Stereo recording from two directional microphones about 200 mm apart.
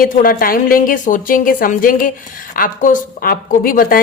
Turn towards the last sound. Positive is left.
turn(degrees=45)  # may be behind; listen again after turning